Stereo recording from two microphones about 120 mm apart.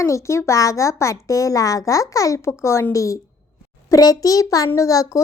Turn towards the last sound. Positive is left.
turn(degrees=30)  # may be behind; listen again after turning